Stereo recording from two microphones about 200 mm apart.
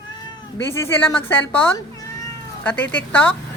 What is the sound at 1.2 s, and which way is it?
Speech, 15° left (ahead or behind).